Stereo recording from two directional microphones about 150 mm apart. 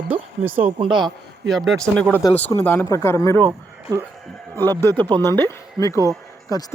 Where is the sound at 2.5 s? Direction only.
30° left (ahead or behind).